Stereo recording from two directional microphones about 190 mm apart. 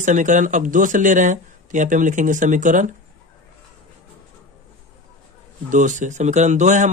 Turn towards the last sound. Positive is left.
turn(degrees=-40)  # may be behind; listen again after turning